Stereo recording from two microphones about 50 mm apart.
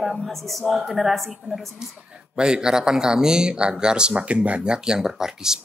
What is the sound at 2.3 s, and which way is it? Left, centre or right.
Speech, centre.